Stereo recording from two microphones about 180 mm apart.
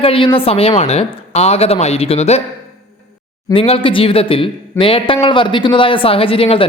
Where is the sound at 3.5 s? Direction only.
30° left (ahead or behind).